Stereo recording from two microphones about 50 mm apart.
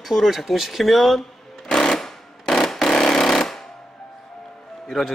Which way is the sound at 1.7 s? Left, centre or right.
Centre.